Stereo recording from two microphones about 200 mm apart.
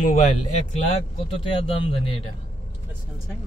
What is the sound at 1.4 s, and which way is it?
Speech, 30° left (ahead or behind).